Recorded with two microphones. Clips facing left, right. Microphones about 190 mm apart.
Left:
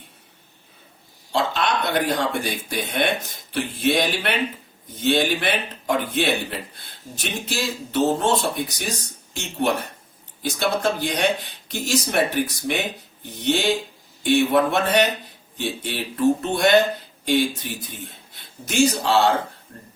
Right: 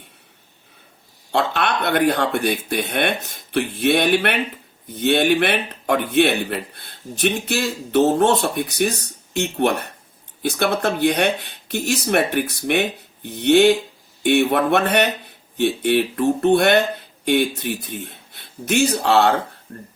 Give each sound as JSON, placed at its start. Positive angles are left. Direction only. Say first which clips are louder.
{"t": 1.3, "sound": "speech", "louder": "right 2 dB", "side_deg": -60}